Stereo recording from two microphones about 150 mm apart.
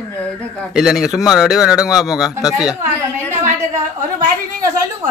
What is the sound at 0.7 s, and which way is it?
Speech, 5° right (ahead or behind).